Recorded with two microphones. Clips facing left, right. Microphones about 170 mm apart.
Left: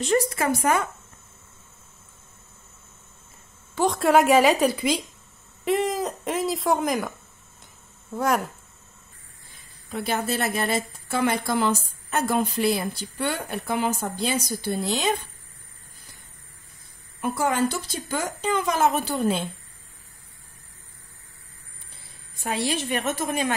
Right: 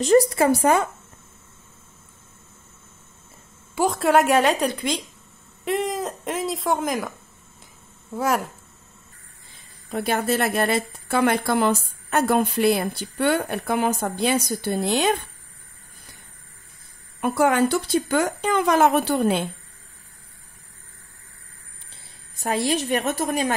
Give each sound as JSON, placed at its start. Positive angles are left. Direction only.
{"t": 0.0, "sound": "a woman's voice", "side_deg": -35}
{"t": 3.7, "sound": "speech", "side_deg": -5}
{"t": 9.9, "sound": "a woman's voice", "side_deg": -55}
{"t": 17.2, "sound": "a woman's voice", "side_deg": -60}
{"t": 22.3, "sound": "a woman's voice", "side_deg": -40}